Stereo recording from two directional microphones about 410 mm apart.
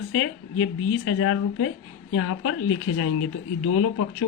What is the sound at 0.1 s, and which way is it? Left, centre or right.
Speech, left.